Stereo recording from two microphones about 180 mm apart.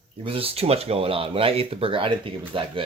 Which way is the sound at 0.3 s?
30° right (ahead or behind).